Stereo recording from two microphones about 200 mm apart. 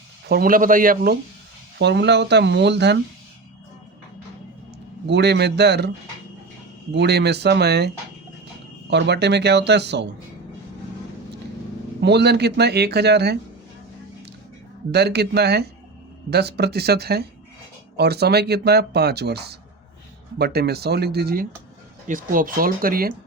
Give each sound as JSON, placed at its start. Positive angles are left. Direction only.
{"t": 0.3, "sound": "speech", "side_deg": -50}
{"t": 1.8, "sound": "speech", "side_deg": -60}
{"t": 5.0, "sound": "speech", "side_deg": -55}
{"t": 6.9, "sound": "speech", "side_deg": -55}
{"t": 8.9, "sound": "speech", "side_deg": -55}
{"t": 11.9, "sound": "speech", "side_deg": -60}
{"t": 14.9, "sound": "speech", "side_deg": -55}